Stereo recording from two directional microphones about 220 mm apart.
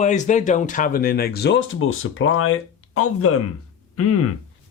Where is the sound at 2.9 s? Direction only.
85° left.